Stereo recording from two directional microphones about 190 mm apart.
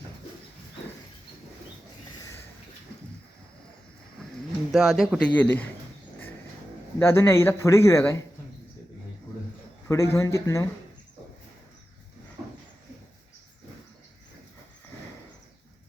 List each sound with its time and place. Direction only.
4.7 s speech: centre (ahead or behind)
7.0 s speech: 15° left (ahead or behind)
9.9 s speech: 15° left (ahead or behind)